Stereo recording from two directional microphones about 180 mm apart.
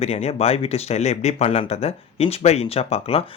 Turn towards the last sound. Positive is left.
turn(degrees=30)  # may be behind; listen again after turning